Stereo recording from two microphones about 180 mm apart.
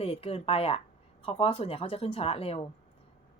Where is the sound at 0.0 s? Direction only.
35° left (ahead or behind).